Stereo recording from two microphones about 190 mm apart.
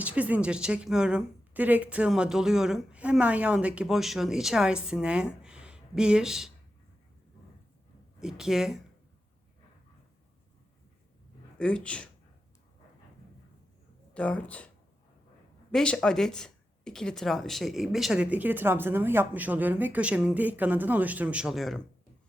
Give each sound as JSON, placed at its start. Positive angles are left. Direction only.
{"t": 0.0, "sound": "a woman's voice", "side_deg": -10}
{"t": 8.2, "sound": "a woman's voice", "side_deg": 0}
{"t": 11.6, "sound": "a woman's voice", "side_deg": 5}
{"t": 14.1, "sound": "speech", "side_deg": 5}
{"t": 15.7, "sound": "speech", "side_deg": 5}